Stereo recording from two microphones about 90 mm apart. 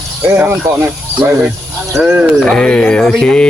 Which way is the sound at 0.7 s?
35° right (ahead or behind).